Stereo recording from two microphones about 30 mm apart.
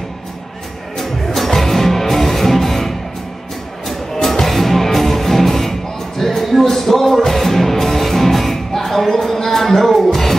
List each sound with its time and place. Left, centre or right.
0.9 s music: centre
4.2 s music: centre